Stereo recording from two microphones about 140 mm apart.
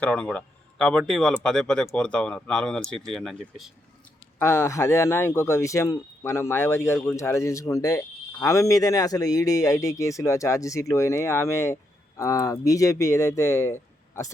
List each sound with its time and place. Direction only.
0.0 s speech: 10° left (ahead or behind)
4.4 s speech: 20° left (ahead or behind)